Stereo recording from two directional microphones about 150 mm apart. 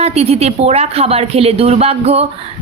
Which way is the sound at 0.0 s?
45° right (ahead or behind).